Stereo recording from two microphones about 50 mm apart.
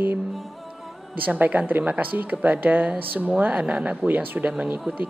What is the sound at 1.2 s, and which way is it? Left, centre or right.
Speech, right.